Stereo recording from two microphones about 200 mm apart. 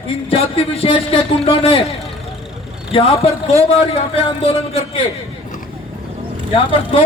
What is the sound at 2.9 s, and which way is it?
Speech, 30° left (ahead or behind).